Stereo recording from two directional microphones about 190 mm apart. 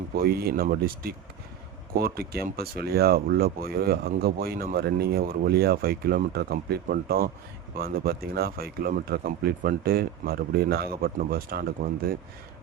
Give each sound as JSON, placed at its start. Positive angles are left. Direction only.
{"t": 0.2, "sound": "speech", "side_deg": -55}